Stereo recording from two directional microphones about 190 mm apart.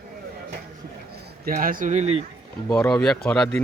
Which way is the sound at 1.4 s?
50° right (ahead or behind).